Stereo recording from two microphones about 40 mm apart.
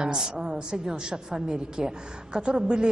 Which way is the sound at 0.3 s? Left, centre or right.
Centre.